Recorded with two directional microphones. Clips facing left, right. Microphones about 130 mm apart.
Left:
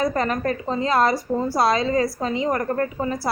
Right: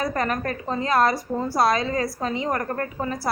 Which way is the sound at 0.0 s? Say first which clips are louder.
Left 3 dB; 25° left (ahead or behind).